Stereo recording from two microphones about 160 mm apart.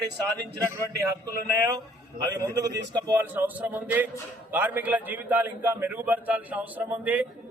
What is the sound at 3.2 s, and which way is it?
A man's voice, 10° right (ahead or behind).